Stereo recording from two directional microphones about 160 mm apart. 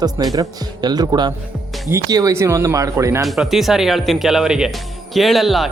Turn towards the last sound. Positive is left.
turn(degrees=0)  # may be behind; listen again after turning